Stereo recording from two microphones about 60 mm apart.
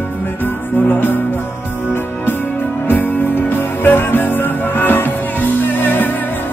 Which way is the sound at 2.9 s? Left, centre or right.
Left.